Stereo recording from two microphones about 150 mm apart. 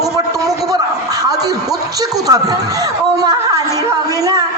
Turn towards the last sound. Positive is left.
turn(degrees=-25)  # may be behind; listen again after turning